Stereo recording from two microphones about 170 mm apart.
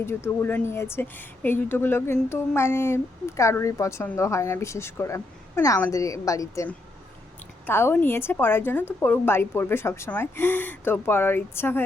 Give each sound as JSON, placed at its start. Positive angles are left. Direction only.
{"t": 0.0, "sound": "a woman's voice", "side_deg": 15}